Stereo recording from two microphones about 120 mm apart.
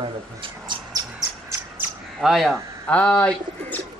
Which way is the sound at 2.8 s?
10° left (ahead or behind).